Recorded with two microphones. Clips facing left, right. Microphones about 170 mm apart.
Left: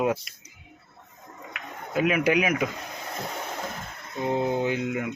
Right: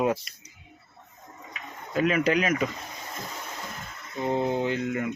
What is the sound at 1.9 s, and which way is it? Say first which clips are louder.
Speech: left 1 dB; 10° left (ahead or behind).